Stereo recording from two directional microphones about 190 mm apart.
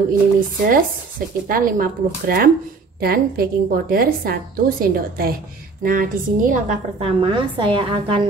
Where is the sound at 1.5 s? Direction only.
50° right (ahead or behind); by 8.2 s 30° right (ahead or behind).